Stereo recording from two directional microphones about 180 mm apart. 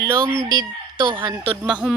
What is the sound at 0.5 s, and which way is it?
Speech, 25° right (ahead or behind).